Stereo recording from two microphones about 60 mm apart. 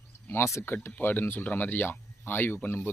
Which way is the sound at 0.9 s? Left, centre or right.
Left.